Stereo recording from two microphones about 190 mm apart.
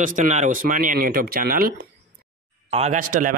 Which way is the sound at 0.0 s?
45° right (ahead or behind).